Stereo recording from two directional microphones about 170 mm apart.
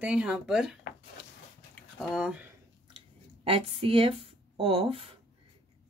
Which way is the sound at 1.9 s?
5° right (ahead or behind).